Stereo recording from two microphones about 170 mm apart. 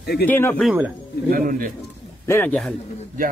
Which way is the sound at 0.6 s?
10° right (ahead or behind).